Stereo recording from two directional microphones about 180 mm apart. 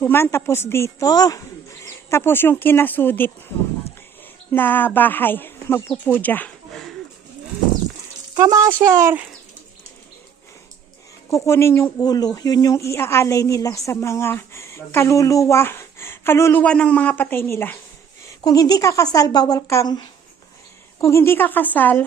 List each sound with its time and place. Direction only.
0.0 s speech: 10° left (ahead or behind)
4.5 s speech: 10° left (ahead or behind)
8.4 s speech: 20° right (ahead or behind)
11.3 s speech: 15° left (ahead or behind)